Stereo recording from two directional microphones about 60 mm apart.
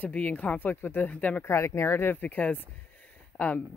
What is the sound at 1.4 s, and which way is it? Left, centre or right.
Speech, left.